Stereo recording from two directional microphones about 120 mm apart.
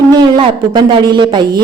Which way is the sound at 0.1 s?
40° right (ahead or behind).